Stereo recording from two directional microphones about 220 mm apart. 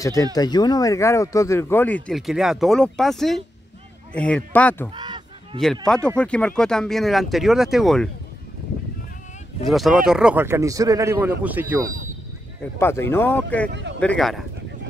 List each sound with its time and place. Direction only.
0.0 s speech: 15° left (ahead or behind)
4.9 s honk: 20° right (ahead or behind)
6.0 s speech: 5° left (ahead or behind)
9.7 s a man's voice: centre (ahead or behind)
12.7 s speech: 10° left (ahead or behind)